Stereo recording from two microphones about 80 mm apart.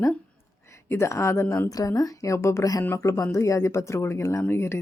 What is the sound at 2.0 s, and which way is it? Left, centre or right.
Speech, left.